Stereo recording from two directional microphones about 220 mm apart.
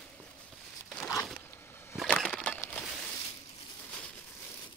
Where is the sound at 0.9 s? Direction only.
5° left (ahead or behind).